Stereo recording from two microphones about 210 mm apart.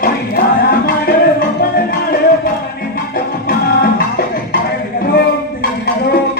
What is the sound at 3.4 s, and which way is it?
Music, 45° left (ahead or behind).